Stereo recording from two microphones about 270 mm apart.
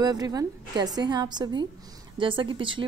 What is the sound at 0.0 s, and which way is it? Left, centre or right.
A woman's voice, centre.